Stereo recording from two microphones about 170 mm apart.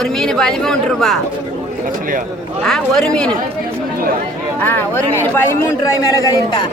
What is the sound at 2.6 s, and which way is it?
Speech, 5° left (ahead or behind).